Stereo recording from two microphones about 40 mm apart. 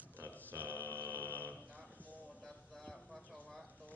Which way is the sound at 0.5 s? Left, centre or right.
Right.